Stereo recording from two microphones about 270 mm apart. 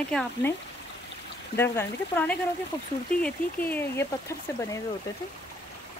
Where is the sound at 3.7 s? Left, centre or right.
Centre.